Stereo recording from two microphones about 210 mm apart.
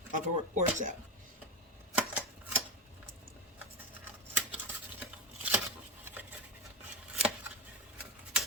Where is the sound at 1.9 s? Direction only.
10° right (ahead or behind).